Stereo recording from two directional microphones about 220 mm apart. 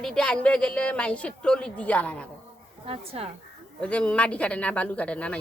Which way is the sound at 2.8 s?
25° right (ahead or behind).